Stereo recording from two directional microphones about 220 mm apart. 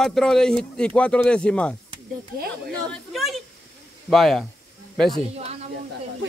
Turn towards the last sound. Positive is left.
turn(degrees=-30)  # may be behind; listen again after turning